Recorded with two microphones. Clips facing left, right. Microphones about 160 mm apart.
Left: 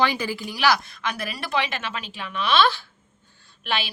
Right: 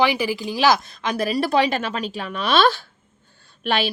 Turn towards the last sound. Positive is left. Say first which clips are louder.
# right 6 dB
turn(degrees=-45)  # may be behind; listen again after turning